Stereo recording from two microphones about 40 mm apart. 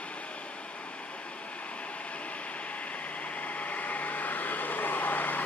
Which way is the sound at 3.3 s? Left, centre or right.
Left.